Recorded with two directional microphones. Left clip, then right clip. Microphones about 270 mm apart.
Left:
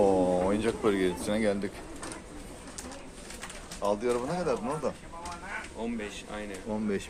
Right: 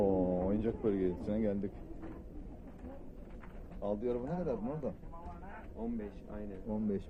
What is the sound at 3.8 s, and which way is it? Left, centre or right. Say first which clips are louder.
Speech: left 9 dB; left.